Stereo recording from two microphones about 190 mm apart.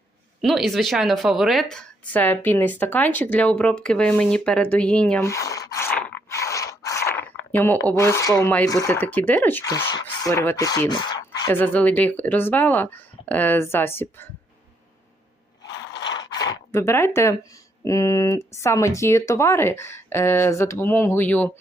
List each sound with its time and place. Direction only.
0.4 s a woman's voice: centre (ahead or behind); by 11.5 s 20° left (ahead or behind)
11.5 s speech: 10° left (ahead or behind)
16.1 s zipper: 20° left (ahead or behind)
17.2 s speech: 15° left (ahead or behind)